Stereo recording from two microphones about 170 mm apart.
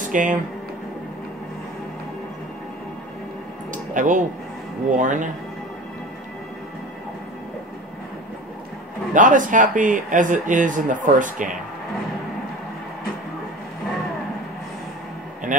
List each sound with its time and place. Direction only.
0.0 s speech: 50° right (ahead or behind)
3.7 s a sound: 50° right (ahead or behind)
4.9 s speech: 50° right (ahead or behind)
9.1 s speech: 50° right (ahead or behind)